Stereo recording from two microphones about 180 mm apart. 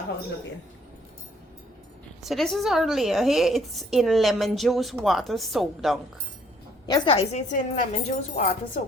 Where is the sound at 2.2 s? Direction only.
Centre (ahead or behind).